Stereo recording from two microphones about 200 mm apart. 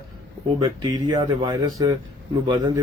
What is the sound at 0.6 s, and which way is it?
Speech, 25° right (ahead or behind).